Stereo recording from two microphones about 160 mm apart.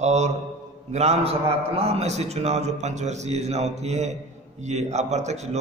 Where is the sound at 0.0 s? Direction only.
45° right (ahead or behind).